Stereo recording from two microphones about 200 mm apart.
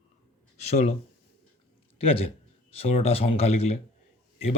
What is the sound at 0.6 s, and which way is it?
Speech, 35° left (ahead or behind).